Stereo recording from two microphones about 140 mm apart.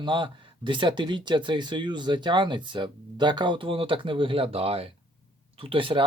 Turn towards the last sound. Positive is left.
turn(degrees=-35)  # may be behind; listen again after turning